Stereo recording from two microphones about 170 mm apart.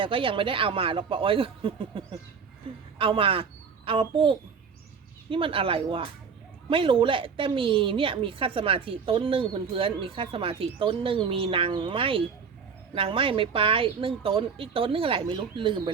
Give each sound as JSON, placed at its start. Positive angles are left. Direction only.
{"t": 0.0, "sound": "a woman's voice", "side_deg": -30}